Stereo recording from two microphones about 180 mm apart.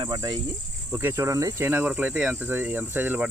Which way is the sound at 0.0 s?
25° right (ahead or behind).